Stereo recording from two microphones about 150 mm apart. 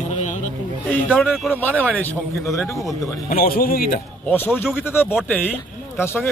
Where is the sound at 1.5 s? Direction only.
10° left (ahead or behind).